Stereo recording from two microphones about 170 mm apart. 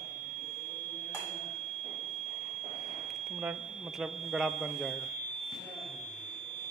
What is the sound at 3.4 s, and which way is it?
Speech, 5° right (ahead or behind).